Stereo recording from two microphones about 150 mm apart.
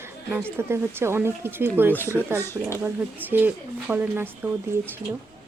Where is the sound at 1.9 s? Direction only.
15° left (ahead or behind).